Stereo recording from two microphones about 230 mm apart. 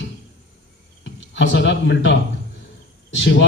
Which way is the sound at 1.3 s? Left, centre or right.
Left.